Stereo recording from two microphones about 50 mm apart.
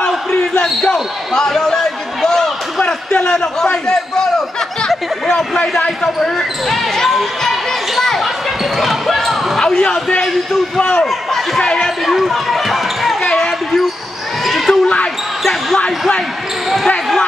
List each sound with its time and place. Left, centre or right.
0.0 s basketball bounce: centre
1.3 s a sound: centre
2.8 s a man's voice: left; by 9.4 s centre
9.6 s speech: centre
11.6 s a sound: centre
12.1 s speech: centre
13.2 s basketball bounce: centre
14.4 s basketball bounce: centre